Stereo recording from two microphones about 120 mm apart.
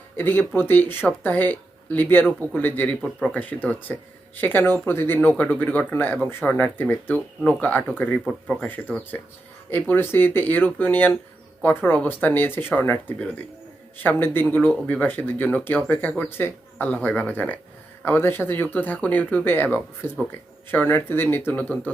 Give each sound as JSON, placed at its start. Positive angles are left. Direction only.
{"t": 0.2, "sound": "speech", "side_deg": 15}
{"t": 3.0, "sound": "speech", "side_deg": 0}
{"t": 3.3, "sound": "speech", "side_deg": 15}